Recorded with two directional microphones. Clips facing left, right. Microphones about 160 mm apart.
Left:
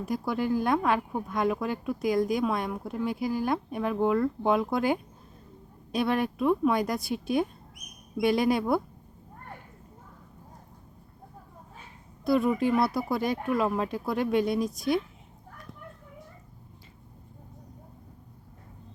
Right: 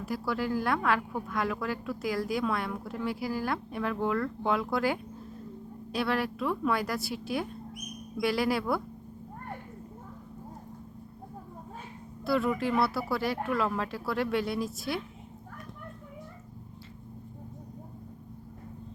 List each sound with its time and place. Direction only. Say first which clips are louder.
0.0 s a woman's voice: left 3 dB; 20° left (ahead or behind)
12.2 s a woman's voice: left 4 dB; 20° left (ahead or behind)